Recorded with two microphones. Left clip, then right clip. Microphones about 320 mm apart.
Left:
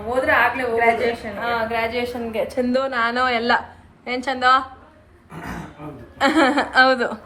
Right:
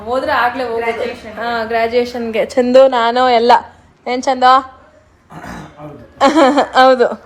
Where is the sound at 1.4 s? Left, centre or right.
Centre.